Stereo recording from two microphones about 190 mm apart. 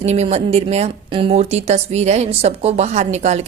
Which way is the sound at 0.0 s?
35° right (ahead or behind).